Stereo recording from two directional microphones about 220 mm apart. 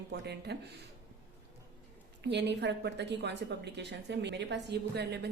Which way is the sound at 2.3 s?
50° right (ahead or behind).